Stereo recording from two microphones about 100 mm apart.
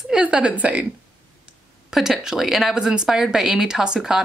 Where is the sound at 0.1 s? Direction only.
10° right (ahead or behind).